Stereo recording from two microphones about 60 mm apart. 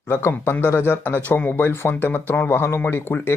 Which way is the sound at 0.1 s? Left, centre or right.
Left.